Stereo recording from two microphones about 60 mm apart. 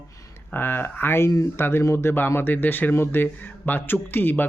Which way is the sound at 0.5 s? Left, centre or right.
Left.